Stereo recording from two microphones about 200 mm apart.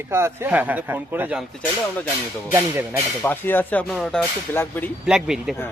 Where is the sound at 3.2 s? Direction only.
10° left (ahead or behind).